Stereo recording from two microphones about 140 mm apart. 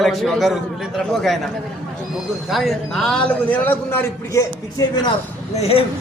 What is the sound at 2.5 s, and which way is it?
A man's voice, centre (ahead or behind).